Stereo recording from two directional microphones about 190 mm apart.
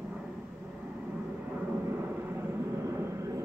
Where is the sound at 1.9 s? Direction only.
10° right (ahead or behind).